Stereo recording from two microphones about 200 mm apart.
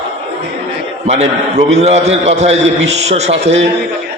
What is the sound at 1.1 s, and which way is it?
A man's voice, 35° right (ahead or behind).